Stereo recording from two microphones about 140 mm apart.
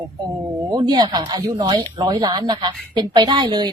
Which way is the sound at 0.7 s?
30° right (ahead or behind).